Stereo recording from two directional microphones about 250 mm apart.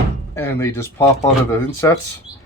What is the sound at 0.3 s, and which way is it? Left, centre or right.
Speech, centre.